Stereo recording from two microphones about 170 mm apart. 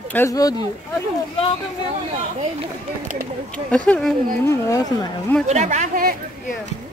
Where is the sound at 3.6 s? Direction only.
10° left (ahead or behind).